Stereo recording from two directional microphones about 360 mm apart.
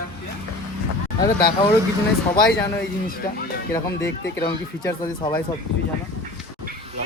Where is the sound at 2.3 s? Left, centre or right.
Left.